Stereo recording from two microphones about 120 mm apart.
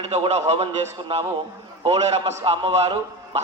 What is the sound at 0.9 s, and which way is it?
A man's voice, 50° right (ahead or behind).